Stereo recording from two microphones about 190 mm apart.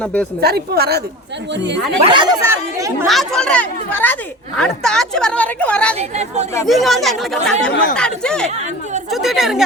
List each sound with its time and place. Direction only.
0.0 s speech: 5° left (ahead or behind)
0.4 s a woman's voice: 55° right (ahead or behind)
2.0 s speech: 25° right (ahead or behind)
3.1 s speech: centre (ahead or behind)
6.0 s speech: 35° right (ahead or behind)
6.7 s speech: centre (ahead or behind)
8.4 s speech: 35° right (ahead or behind)
9.0 s speech: centre (ahead or behind)